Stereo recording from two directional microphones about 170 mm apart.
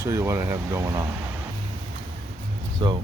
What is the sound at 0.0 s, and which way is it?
Speech, 20° right (ahead or behind).